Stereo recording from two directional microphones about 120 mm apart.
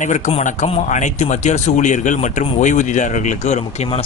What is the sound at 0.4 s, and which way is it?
A man's voice, 90° left.